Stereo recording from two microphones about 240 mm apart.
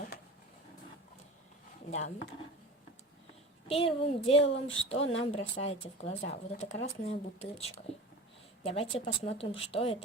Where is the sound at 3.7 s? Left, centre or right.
Left.